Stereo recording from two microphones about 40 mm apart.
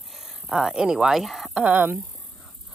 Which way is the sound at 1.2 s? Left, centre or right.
Centre.